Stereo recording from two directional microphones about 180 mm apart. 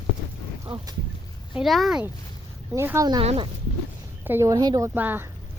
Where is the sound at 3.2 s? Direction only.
30° right (ahead or behind).